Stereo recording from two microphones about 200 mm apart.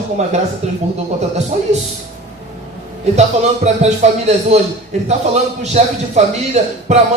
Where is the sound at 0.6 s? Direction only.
30° right (ahead or behind).